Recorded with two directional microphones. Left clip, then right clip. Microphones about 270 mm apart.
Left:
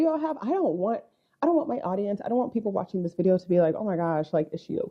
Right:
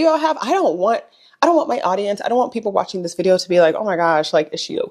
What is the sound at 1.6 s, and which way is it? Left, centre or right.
Speech, centre.